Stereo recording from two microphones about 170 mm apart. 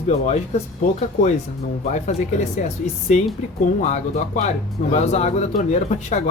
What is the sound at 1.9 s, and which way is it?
Speech, 45° left (ahead or behind).